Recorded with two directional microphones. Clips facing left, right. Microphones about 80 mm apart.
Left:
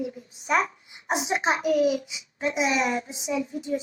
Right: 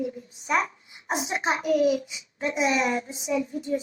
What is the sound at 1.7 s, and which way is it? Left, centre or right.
Speech, right.